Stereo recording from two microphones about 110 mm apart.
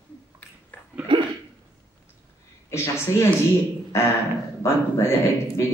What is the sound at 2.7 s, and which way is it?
Speech, 25° left (ahead or behind).